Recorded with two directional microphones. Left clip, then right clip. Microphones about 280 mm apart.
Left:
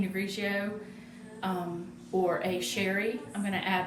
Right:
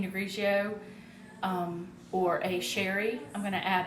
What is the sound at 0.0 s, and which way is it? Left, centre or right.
Speech, centre.